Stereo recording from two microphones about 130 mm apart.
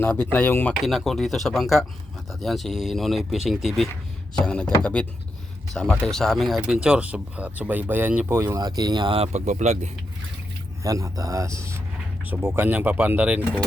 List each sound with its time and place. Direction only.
0.0 s speech: 15° left (ahead or behind)
0.8 s speech: centre (ahead or behind)
6.8 s speech: 10° right (ahead or behind)
8.4 s speech: 30° right (ahead or behind); by 9.9 s 65° right (ahead or behind)
10.8 s a man's voice: 25° right (ahead or behind)